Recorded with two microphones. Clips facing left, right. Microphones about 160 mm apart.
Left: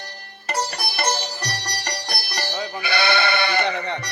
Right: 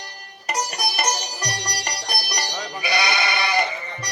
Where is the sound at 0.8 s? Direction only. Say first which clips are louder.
Even; 30° left (ahead or behind).